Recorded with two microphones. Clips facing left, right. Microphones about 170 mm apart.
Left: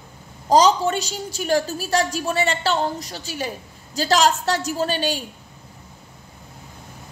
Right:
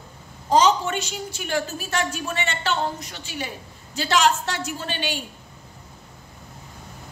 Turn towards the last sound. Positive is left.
turn(degrees=40)  # may be behind; listen again after turning